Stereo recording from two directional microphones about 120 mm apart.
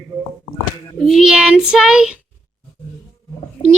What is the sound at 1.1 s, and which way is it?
Child singing, 5° right (ahead or behind).